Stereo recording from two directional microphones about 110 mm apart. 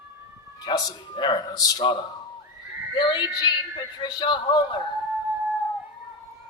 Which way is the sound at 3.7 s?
45° left (ahead or behind).